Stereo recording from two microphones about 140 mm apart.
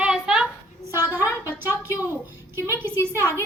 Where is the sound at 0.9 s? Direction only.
15° right (ahead or behind).